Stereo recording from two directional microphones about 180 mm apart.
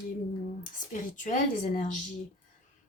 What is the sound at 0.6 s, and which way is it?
Speech, 45° left (ahead or behind).